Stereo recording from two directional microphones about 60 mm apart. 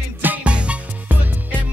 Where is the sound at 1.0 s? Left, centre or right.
Right.